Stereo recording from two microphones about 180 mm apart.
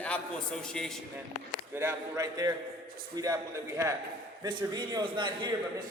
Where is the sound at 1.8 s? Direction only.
15° right (ahead or behind).